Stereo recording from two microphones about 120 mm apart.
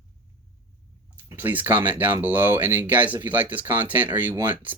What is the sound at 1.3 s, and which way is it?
Speech, 15° right (ahead or behind).